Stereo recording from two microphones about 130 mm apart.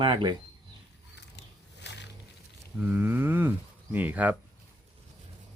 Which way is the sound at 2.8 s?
15° right (ahead or behind).